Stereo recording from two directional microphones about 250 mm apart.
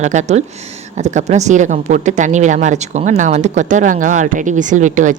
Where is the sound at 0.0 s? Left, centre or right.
Right.